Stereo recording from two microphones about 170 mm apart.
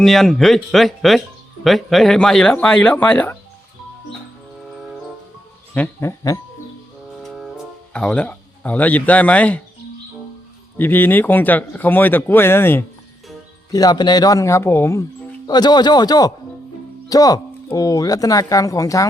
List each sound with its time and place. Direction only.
0.0 s speech: centre (ahead or behind)
5.7 s speech: 10° left (ahead or behind)
7.2 s music: centre (ahead or behind)
10.8 s speech: 10° left (ahead or behind)
13.7 s speech: 25° left (ahead or behind)